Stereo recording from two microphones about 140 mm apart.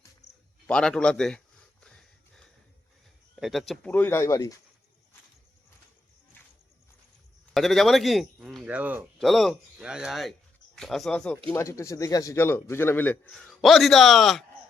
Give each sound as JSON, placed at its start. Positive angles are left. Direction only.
{"t": 0.7, "sound": "speech", "side_deg": 5}
{"t": 1.8, "sound": "a sound", "side_deg": 5}
{"t": 3.3, "sound": "speech", "side_deg": 0}
{"t": 3.9, "sound": "a man's voice", "side_deg": 15}
{"t": 7.5, "sound": "speech", "side_deg": 0}
{"t": 9.1, "sound": "speech", "side_deg": 0}
{"t": 11.4, "sound": "a man's voice", "side_deg": 20}
{"t": 13.5, "sound": "speech", "side_deg": 0}